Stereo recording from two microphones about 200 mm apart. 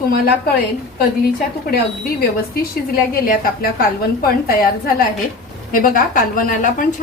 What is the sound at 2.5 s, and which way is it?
A woman's voice, 45° left (ahead or behind).